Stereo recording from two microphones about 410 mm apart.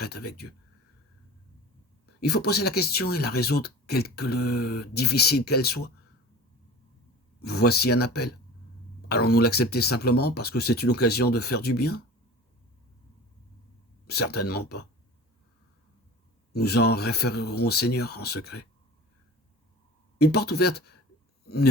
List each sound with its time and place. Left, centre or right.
0.0 s speech: left
2.2 s speech: left
7.4 s speech: left
14.1 s speech: left
16.5 s speech: left
20.1 s speech: left